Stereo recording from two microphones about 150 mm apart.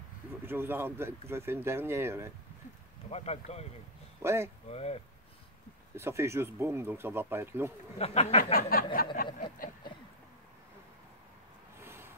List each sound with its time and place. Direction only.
0.5 s speech: 15° right (ahead or behind)
3.1 s speech: 45° left (ahead or behind)
4.2 s speech: 15° right (ahead or behind)
4.6 s speech: 45° left (ahead or behind)
5.9 s speech: 20° right (ahead or behind)
8.0 s speech: 45° left (ahead or behind)
8.5 s a sound: 75° left (ahead or behind)
11.8 s a sound: 15° right (ahead or behind)